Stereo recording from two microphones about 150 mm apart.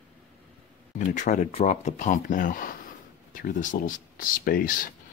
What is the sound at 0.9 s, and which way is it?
Speech, 55° left (ahead or behind).